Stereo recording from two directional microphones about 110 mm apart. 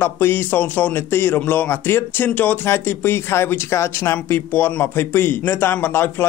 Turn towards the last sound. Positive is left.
turn(degrees=20)  # may be behind; listen again after turning